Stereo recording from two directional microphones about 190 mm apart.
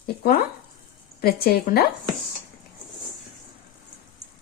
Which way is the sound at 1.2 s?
55° left (ahead or behind).